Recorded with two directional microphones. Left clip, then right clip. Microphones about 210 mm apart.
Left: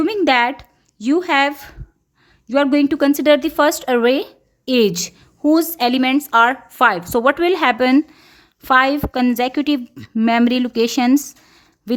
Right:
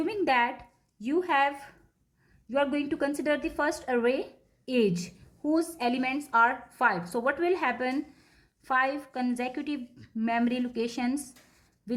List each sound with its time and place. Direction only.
0.0 s a woman's voice: 45° left (ahead or behind)